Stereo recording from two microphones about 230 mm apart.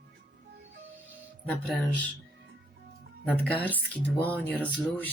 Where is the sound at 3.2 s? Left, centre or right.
Centre.